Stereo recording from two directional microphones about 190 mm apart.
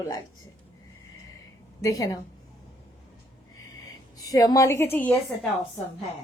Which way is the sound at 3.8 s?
20° left (ahead or behind).